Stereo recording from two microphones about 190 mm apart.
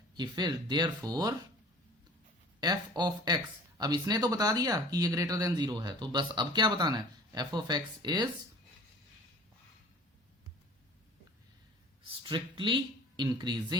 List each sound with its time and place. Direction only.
0.1 s speech: 25° right (ahead or behind)
2.6 s speech: 20° right (ahead or behind)
12.2 s speech: 25° right (ahead or behind)